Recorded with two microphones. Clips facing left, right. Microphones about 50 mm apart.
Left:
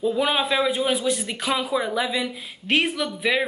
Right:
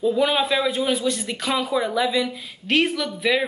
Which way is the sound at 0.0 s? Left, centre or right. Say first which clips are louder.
Right 2 dB; centre.